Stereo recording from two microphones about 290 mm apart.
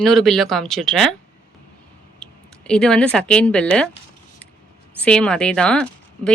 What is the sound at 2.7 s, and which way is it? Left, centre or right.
Speech, centre.